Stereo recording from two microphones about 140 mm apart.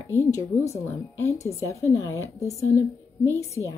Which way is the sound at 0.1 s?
20° left (ahead or behind).